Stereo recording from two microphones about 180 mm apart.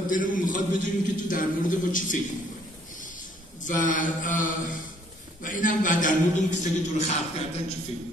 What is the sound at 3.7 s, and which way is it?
A man's voice, 45° left (ahead or behind).